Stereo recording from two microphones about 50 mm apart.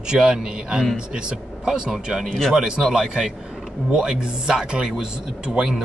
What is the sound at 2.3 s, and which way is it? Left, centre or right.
Speech, centre.